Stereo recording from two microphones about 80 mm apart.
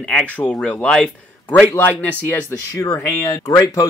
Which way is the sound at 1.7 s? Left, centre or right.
Left.